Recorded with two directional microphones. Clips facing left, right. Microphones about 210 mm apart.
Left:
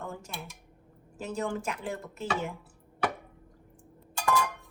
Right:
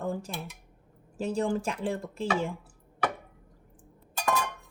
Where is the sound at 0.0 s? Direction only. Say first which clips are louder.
Right 7 dB; 35° right (ahead or behind).